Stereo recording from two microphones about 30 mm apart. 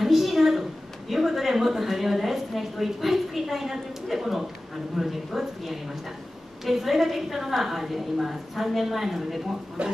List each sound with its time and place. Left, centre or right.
0.0 s a woman's voice: centre
9.8 s a man's voice: right